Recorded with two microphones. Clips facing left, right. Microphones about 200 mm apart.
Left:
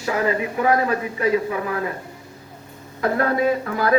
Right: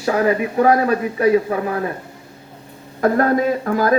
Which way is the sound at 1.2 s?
35° right (ahead or behind).